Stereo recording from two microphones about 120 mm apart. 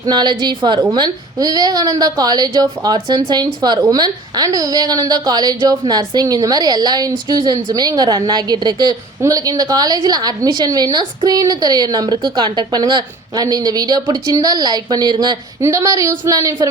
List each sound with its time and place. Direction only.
0.0 s a woman's voice: 35° right (ahead or behind)